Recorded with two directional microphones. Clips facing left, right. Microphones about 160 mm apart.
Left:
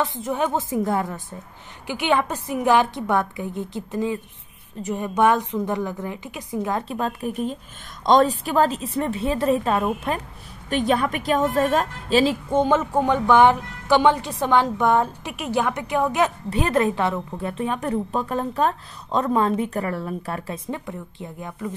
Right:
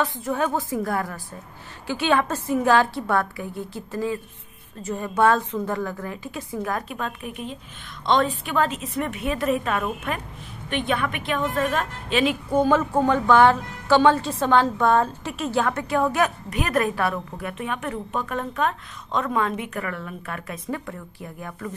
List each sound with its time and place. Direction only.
0.0 s a woman's voice: 20° left (ahead or behind)
6.9 s a woman's voice: 35° left (ahead or behind)
12.4 s a woman's voice: 20° left (ahead or behind)
16.4 s a woman's voice: 30° left (ahead or behind)